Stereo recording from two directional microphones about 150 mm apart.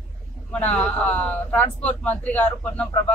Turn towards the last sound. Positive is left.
turn(degrees=10)  # may be behind; listen again after turning